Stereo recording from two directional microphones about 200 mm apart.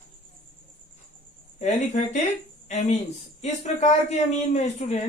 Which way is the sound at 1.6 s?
35° left (ahead or behind).